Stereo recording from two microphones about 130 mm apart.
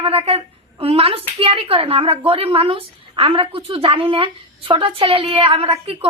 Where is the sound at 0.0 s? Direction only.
45° right (ahead or behind).